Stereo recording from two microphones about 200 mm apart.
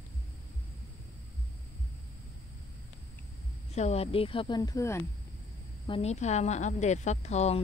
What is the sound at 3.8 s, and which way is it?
Speech, 30° left (ahead or behind).